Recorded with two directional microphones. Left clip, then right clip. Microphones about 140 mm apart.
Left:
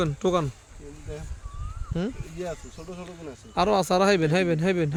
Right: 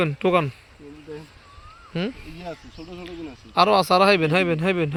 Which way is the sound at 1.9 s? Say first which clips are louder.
Right 3 dB; 5° left (ahead or behind).